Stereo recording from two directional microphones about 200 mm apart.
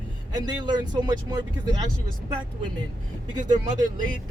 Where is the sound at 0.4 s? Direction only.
20° right (ahead or behind).